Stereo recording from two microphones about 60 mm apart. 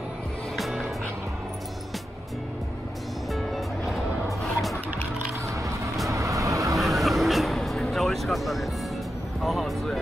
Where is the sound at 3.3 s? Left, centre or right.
Centre.